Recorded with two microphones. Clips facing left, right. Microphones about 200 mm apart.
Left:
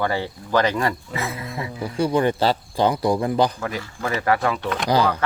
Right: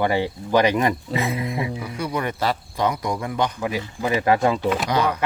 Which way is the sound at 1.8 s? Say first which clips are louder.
Left 6 dB; 30° left (ahead or behind).